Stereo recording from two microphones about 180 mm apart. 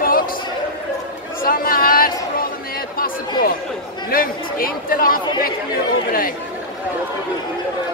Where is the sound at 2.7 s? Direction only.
55° left (ahead or behind).